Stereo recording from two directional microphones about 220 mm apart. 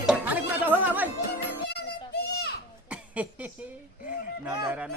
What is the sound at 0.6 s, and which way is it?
Chatter, 10° right (ahead or behind).